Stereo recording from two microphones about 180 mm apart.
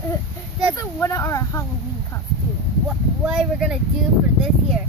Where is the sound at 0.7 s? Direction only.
15° left (ahead or behind).